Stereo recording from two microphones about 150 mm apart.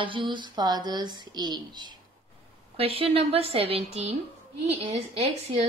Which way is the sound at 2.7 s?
40° right (ahead or behind).